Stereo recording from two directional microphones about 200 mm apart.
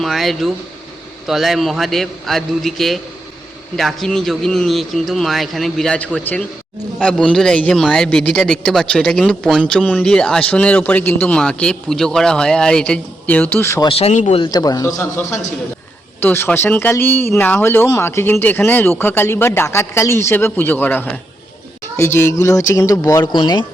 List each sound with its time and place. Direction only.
0.0 s speech: centre (ahead or behind)
13.8 s speech: 30° left (ahead or behind)